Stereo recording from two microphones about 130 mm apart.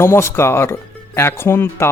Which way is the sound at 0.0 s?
20° left (ahead or behind).